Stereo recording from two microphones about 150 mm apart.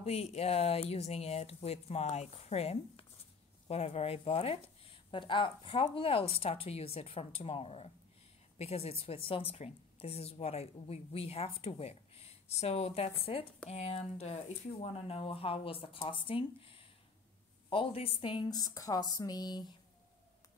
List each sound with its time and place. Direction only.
0.0 s a woman's voice: 45° left (ahead or behind); by 19.7 s 25° left (ahead or behind)